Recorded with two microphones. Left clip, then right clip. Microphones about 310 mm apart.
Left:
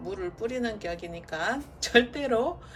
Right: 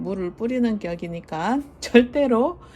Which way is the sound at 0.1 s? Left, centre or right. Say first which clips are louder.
Right 5 dB; centre.